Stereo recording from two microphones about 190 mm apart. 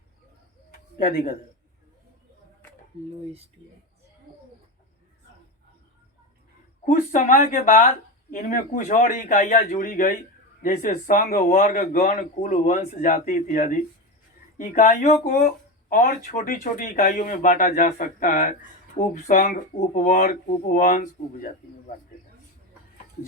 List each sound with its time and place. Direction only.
6.8 s speech: 45° left (ahead or behind)